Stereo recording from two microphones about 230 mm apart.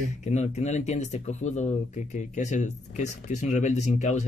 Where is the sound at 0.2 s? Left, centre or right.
Left.